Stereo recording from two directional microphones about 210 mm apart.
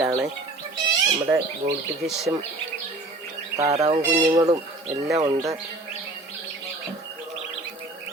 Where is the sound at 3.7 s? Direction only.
30° right (ahead or behind).